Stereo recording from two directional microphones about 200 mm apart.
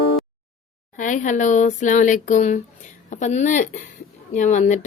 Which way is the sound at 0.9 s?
40° left (ahead or behind).